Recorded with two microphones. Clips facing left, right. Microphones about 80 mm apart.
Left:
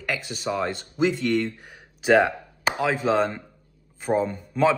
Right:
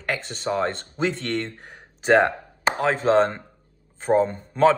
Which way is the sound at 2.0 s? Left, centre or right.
Right.